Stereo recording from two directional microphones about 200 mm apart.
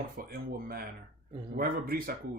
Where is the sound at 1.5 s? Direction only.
45° right (ahead or behind).